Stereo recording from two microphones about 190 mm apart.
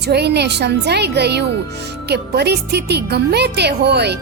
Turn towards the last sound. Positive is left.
turn(degrees=-60)  # may be behind; listen again after turning